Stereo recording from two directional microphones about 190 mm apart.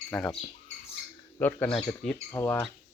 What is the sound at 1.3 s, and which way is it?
Speech, 10° left (ahead or behind).